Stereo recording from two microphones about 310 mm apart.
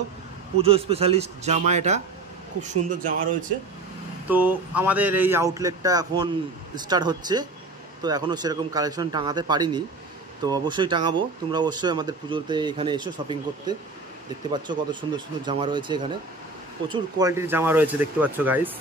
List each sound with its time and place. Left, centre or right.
0.6 s speech: centre
4.3 s speech: centre